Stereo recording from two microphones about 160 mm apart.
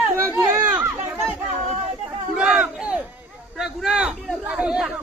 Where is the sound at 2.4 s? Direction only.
5° right (ahead or behind).